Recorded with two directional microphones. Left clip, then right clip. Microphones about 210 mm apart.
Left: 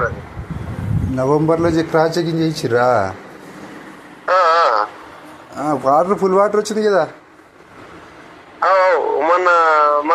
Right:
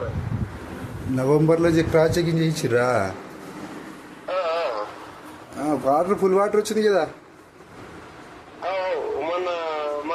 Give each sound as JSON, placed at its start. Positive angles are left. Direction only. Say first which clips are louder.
{"t": 1.1, "sound": "a man's voice", "louder": "left 4 dB", "side_deg": 0}
{"t": 4.3, "sound": "a sound", "louder": "left 12 dB", "side_deg": 25}
{"t": 5.6, "sound": "a man's voice", "louder": "left 6 dB", "side_deg": 5}
{"t": 8.6, "sound": "radio", "louder": "left 12 dB", "side_deg": 25}